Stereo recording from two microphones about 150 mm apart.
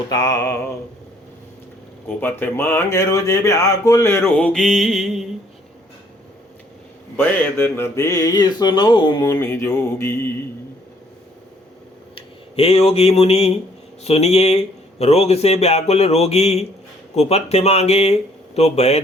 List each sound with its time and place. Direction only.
0.1 s speech: 25° left (ahead or behind)
2.0 s speech: 15° left (ahead or behind); by 5.3 s centre (ahead or behind)
7.2 s speech: 15° left (ahead or behind); by 9.2 s 30° left (ahead or behind)
9.4 s speech: 20° left (ahead or behind)
12.1 s speech: 40° left (ahead or behind)